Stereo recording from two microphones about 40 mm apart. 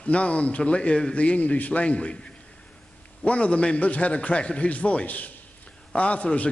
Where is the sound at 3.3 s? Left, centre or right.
Left.